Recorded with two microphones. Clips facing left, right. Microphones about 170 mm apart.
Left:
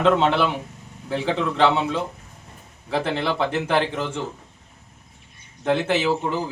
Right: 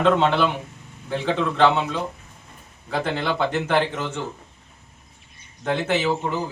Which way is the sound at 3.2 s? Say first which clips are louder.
Even; 5° left (ahead or behind).